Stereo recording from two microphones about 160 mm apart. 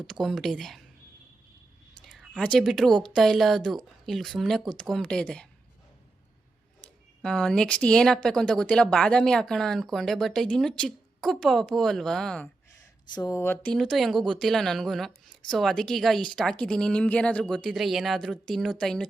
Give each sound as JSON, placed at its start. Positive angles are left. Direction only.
{"t": 0.1, "sound": "speech", "side_deg": 0}
{"t": 2.0, "sound": "speech", "side_deg": 0}
{"t": 6.8, "sound": "speech", "side_deg": 5}
{"t": 13.1, "sound": "speech", "side_deg": 20}